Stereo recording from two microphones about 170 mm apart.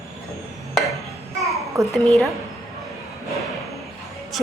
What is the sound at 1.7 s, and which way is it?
Speech, 20° right (ahead or behind).